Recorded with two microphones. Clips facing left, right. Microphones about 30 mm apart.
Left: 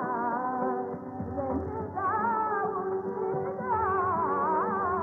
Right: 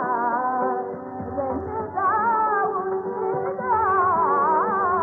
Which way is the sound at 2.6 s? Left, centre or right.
Right.